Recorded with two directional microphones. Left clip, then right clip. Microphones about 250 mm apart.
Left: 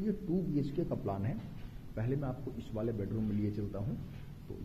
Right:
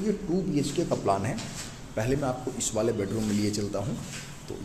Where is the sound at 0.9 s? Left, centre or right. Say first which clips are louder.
Right 12 dB; centre.